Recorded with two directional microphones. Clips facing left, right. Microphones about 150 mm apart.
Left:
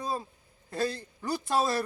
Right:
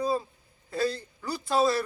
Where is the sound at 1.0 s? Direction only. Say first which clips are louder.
Left 2 dB; 45° left (ahead or behind).